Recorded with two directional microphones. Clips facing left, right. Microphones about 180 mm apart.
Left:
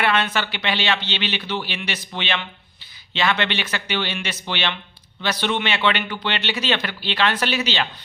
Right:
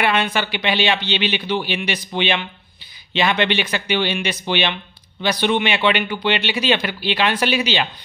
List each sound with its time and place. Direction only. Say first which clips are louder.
0.0 s a man's voice: right 2 dB; 15° right (ahead or behind)